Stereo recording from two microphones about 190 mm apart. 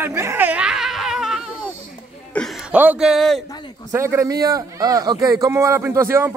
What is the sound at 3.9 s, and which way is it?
A man's voice, 15° right (ahead or behind).